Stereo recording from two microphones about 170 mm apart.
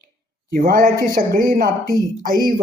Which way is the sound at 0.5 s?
60° right (ahead or behind).